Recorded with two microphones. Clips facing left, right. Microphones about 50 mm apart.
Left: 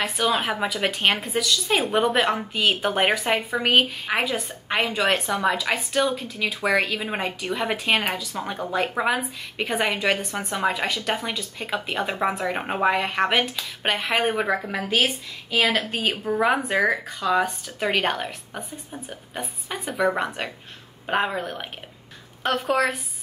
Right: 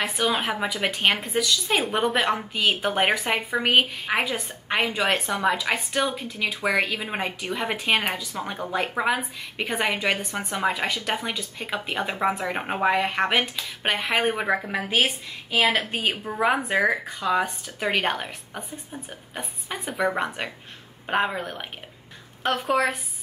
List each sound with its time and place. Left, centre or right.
0.0 s a woman's voice: centre
8.1 s a woman's voice: centre
14.5 s a woman's voice: centre